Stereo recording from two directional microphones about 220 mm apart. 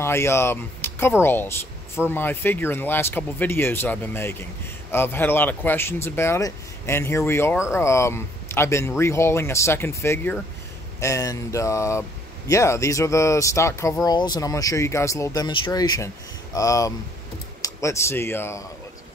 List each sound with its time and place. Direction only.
0.0 s speech: 10° left (ahead or behind)